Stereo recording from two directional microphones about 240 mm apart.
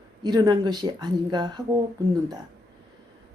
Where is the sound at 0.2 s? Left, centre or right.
Centre.